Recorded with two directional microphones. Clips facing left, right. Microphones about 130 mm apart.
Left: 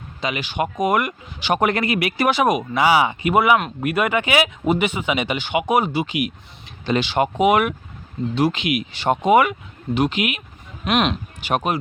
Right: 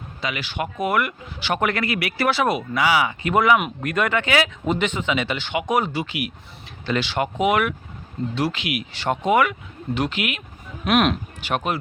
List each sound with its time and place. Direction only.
0.2 s speech: 20° left (ahead or behind)
2.7 s speech: 30° left (ahead or behind)
3.2 s speech: 10° left (ahead or behind)
10.8 s speech: 5° right (ahead or behind)
11.3 s speech: 15° left (ahead or behind)